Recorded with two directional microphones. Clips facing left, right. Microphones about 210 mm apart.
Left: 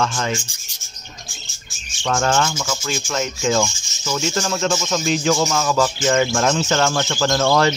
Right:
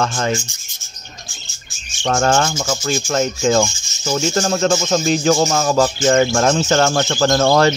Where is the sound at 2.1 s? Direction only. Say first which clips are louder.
Right 3 dB; 45° right (ahead or behind).